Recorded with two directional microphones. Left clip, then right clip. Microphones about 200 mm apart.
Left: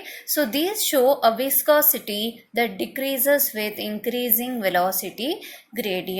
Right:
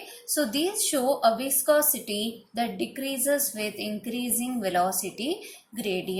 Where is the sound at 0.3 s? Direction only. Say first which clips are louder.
Left 4 dB; 30° left (ahead or behind).